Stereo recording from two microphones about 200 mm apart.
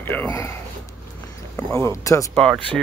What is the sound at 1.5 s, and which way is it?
Speech, 15° left (ahead or behind).